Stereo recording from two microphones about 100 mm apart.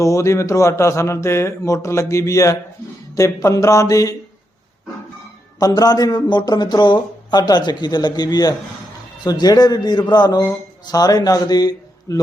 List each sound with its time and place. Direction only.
0.0 s a man's voice: 30° left (ahead or behind)
5.5 s a man's voice: 40° left (ahead or behind)